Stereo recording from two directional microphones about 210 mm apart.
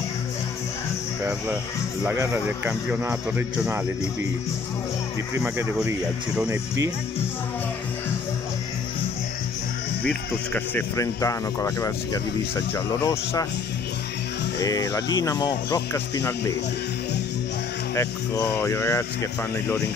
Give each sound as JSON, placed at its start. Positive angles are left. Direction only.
{"t": 2.0, "sound": "a man's voice", "side_deg": -10}
{"t": 5.4, "sound": "speech", "side_deg": -10}
{"t": 10.0, "sound": "speech", "side_deg": 5}
{"t": 14.6, "sound": "speech", "side_deg": 20}
{"t": 17.9, "sound": "speech", "side_deg": 10}